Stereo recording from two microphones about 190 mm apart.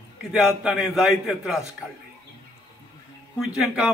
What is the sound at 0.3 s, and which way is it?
A man's voice, centre (ahead or behind).